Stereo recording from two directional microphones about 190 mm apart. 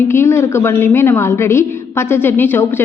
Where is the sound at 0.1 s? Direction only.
15° left (ahead or behind).